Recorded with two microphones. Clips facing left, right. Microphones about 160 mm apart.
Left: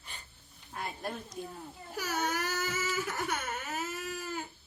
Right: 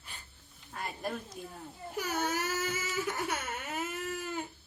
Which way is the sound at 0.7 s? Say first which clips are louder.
Right 1 dB; centre (ahead or behind).